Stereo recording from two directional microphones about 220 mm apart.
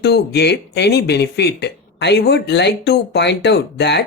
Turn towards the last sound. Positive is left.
turn(degrees=50)  # may be behind; listen again after turning